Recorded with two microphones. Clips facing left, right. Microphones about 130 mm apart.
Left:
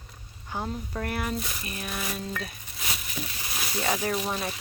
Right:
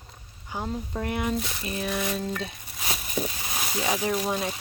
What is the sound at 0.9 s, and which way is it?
Speech, 20° right (ahead or behind).